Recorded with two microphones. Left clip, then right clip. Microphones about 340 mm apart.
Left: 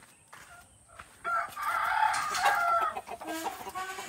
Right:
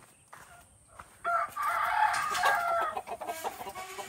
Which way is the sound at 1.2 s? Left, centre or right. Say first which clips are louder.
Right 2 dB; centre.